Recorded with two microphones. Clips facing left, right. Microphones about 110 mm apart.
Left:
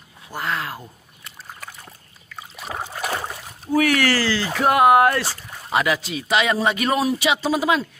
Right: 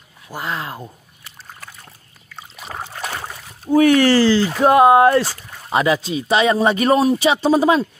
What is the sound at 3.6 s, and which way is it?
Speech, 25° right (ahead or behind).